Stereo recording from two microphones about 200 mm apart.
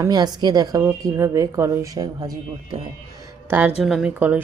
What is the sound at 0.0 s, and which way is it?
Speech, 20° right (ahead or behind).